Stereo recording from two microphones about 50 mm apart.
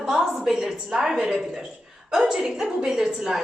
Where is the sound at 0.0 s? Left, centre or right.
Centre.